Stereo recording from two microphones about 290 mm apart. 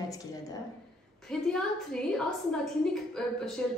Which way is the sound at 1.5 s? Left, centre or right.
Centre.